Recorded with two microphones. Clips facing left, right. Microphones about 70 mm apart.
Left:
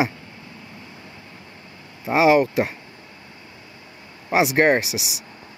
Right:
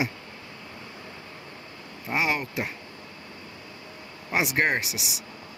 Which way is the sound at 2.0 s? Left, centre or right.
Left.